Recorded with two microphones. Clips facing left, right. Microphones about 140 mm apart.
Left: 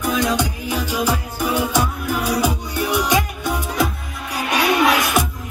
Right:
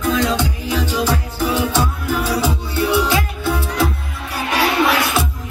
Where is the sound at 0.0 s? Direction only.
10° left (ahead or behind).